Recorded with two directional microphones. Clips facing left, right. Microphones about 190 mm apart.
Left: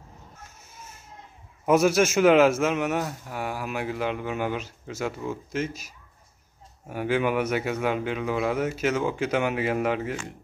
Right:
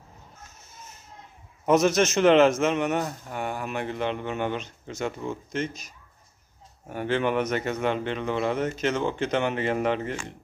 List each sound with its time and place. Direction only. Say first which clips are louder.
1.7 s a man's voice: left 1 dB; 10° left (ahead or behind)